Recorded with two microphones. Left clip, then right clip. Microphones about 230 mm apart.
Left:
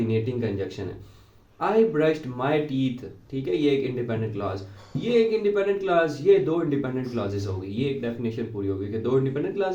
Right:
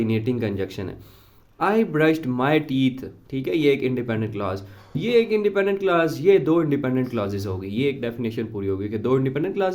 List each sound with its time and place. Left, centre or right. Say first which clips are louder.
0.1 s a man's voice: right 2 dB; right